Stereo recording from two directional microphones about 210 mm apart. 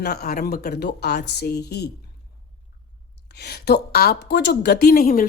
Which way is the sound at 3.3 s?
50° left (ahead or behind).